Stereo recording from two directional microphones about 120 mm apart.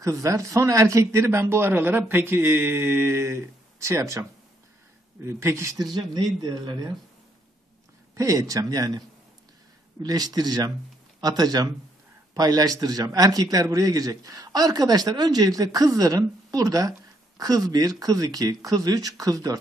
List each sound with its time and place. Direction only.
0.0 s speech: 25° right (ahead or behind)
5.9 s a man's voice: 35° right (ahead or behind)
8.2 s speech: 30° right (ahead or behind)
10.0 s a man's voice: 30° right (ahead or behind)